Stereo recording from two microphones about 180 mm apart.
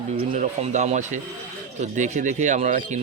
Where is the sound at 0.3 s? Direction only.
40° right (ahead or behind).